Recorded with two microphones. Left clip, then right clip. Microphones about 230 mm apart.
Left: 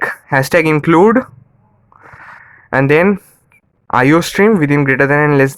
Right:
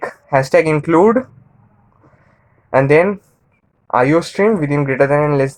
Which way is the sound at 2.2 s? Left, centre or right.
Left.